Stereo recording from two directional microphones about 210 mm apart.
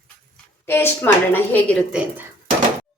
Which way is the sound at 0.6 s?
10° left (ahead or behind).